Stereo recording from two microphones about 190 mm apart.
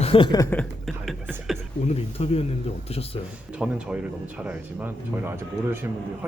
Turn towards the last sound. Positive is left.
turn(degrees=-10)  # may be behind; listen again after turning